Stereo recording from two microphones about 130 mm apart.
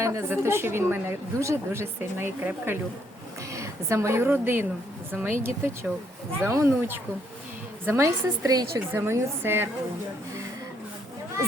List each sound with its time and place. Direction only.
0.0 s a woman's voice: 20° right (ahead or behind)